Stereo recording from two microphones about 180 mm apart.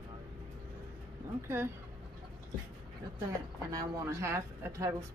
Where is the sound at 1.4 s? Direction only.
15° right (ahead or behind).